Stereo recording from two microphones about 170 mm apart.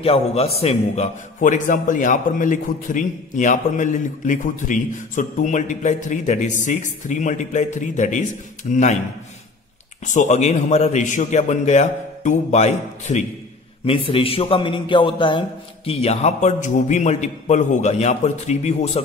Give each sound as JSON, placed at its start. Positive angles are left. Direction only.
{"t": 0.0, "sound": "a man's voice", "side_deg": 35}
{"t": 10.1, "sound": "a man's voice", "side_deg": 40}
{"t": 13.8, "sound": "a man's voice", "side_deg": 30}